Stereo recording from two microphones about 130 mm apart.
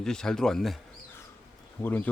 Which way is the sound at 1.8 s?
15° left (ahead or behind).